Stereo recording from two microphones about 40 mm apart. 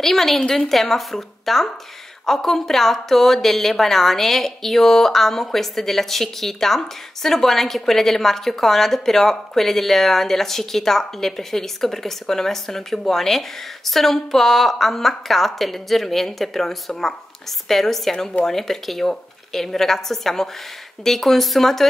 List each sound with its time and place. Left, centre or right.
0.0 s a woman's voice: centre